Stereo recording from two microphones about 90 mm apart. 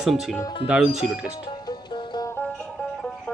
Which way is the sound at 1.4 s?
55° left (ahead or behind).